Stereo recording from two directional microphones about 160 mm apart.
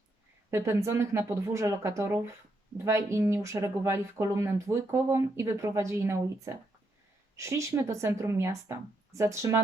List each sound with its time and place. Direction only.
0.5 s speech: 15° right (ahead or behind)